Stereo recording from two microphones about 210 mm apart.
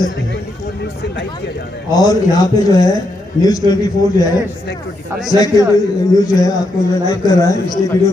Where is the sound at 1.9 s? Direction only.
20° left (ahead or behind).